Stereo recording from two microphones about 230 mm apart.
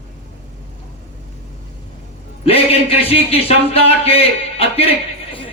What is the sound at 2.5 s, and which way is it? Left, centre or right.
A man's voice, left.